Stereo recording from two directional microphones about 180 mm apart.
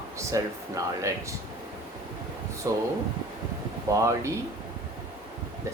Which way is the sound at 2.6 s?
20° right (ahead or behind).